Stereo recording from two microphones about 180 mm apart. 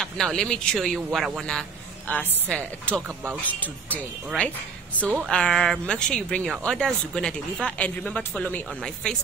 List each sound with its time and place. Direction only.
0.0 s speech: 5° left (ahead or behind)